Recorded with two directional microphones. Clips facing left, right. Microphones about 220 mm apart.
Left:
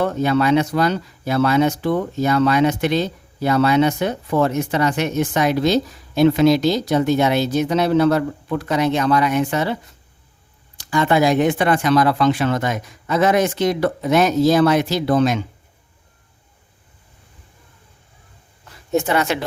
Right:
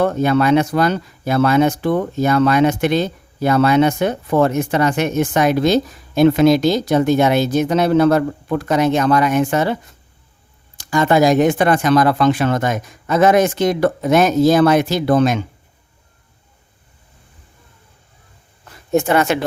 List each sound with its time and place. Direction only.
0.0 s speech: 50° right (ahead or behind)
10.8 s speech: 45° right (ahead or behind)
18.9 s speech: 50° right (ahead or behind)